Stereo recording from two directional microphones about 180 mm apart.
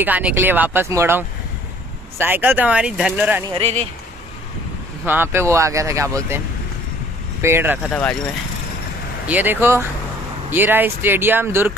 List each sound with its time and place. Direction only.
0.0 s speech: 10° right (ahead or behind)
3.5 s speech: 35° right (ahead or behind)
5.0 s speech: 10° right (ahead or behind)
7.4 s speech: 10° right (ahead or behind)
7.9 s speech: 5° left (ahead or behind)
9.3 s speech: 10° right (ahead or behind)